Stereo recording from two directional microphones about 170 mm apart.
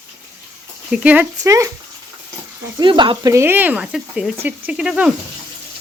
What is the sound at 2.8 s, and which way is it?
Speech, 30° right (ahead or behind).